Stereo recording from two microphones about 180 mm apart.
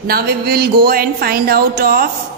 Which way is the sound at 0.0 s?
55° right (ahead or behind).